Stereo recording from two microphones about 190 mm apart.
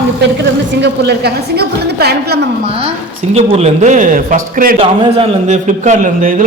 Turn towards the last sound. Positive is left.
turn(degrees=-45)  # may be behind; listen again after turning